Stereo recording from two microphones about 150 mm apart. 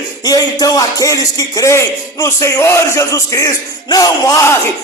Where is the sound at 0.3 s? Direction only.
25° left (ahead or behind).